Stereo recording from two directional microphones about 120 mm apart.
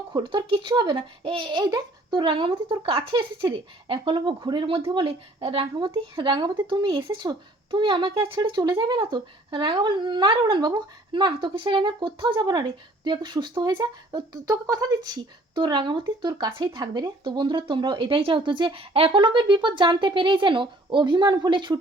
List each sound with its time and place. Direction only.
0.1 s speech: 40° right (ahead or behind)